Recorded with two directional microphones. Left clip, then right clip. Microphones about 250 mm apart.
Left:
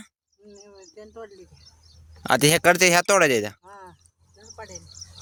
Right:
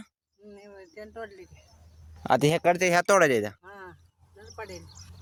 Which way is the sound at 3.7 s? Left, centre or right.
Right.